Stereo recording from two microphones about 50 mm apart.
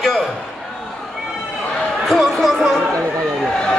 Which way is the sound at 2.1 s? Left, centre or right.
Centre.